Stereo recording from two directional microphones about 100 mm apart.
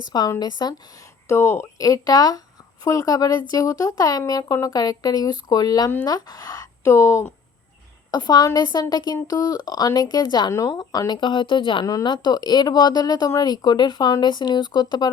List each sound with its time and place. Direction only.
0.0 s a woman's voice: 45° left (ahead or behind); by 7.3 s 30° left (ahead or behind)
8.1 s a woman's voice: 45° left (ahead or behind)